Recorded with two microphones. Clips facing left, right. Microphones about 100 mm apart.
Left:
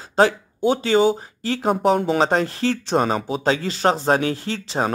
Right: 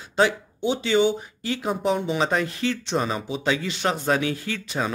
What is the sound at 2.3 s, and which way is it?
Speech, 35° left (ahead or behind).